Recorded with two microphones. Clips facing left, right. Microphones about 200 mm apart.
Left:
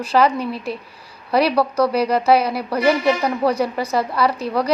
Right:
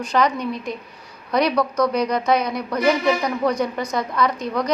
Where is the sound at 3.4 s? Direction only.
30° left (ahead or behind).